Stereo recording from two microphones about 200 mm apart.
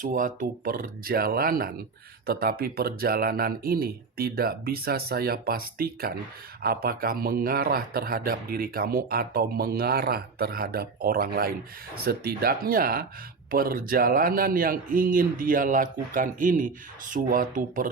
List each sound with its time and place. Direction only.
0.0 s a man's voice: 40° right (ahead or behind)